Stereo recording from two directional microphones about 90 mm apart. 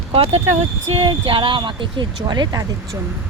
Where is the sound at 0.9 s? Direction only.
90° right; by 2.6 s 50° right (ahead or behind).